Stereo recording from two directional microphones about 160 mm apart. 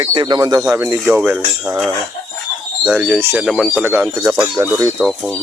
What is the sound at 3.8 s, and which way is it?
Speech, 15° right (ahead or behind).